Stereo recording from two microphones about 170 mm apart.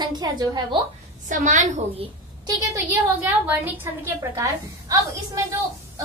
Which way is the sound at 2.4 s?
15° right (ahead or behind).